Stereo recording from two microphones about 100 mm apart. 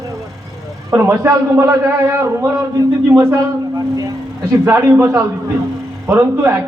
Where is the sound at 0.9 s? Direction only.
30° right (ahead or behind).